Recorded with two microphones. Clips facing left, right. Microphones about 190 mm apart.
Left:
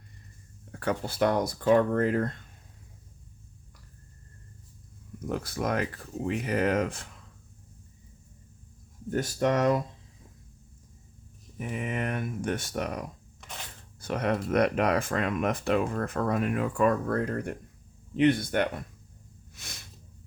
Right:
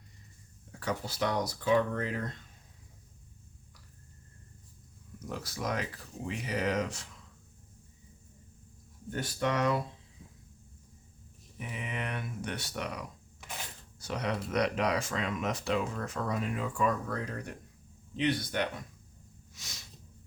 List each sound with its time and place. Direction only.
0.7 s speech: 60° left (ahead or behind)
5.2 s speech: 55° left (ahead or behind)
9.0 s speech: 45° left (ahead or behind)
11.5 s speech: 50° left (ahead or behind)
19.5 s a sound: 55° left (ahead or behind)